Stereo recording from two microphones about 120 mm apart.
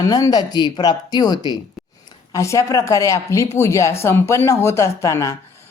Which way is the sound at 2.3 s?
25° left (ahead or behind).